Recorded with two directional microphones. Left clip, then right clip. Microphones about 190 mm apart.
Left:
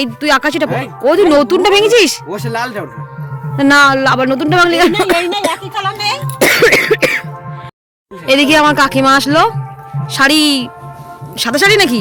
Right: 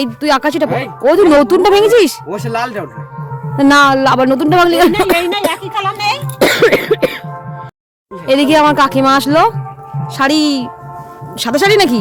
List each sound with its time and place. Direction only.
0.0 s a man's voice: 10° right (ahead or behind)
2.3 s a man's voice: centre (ahead or behind)
5.5 s speech: 20° left (ahead or behind)
6.4 s cough: 5° right (ahead or behind)
8.3 s a man's voice: 5° right (ahead or behind)